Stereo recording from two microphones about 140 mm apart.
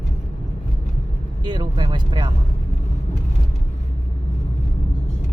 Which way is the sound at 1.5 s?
35° right (ahead or behind).